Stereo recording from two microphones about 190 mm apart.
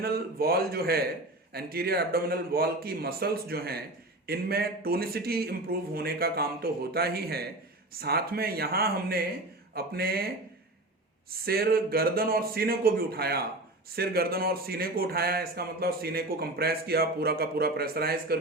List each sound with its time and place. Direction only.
0.0 s speech: 55° right (ahead or behind)
11.3 s speech: 55° right (ahead or behind)